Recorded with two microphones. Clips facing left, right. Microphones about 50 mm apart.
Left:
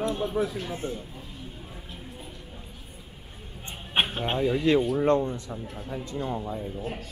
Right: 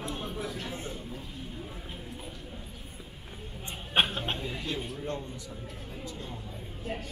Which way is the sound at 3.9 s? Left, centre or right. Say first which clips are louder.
Left 2 dB; left.